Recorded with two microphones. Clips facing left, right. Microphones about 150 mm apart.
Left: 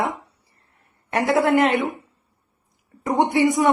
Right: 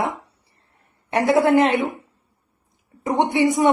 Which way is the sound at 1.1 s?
20° right (ahead or behind).